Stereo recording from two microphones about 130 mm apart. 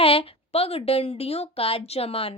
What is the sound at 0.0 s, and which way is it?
A woman's voice, 45° left (ahead or behind).